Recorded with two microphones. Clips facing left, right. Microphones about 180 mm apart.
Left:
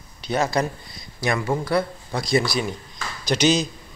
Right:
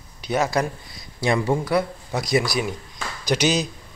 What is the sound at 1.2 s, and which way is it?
Speech, 30° right (ahead or behind).